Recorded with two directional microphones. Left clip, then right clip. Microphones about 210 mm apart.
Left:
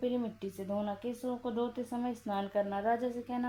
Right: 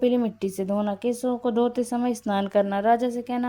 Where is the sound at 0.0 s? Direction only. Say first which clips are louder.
Right 12 dB; 35° right (ahead or behind).